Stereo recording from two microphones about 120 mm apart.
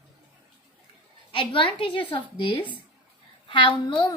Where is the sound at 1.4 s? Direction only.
45° left (ahead or behind).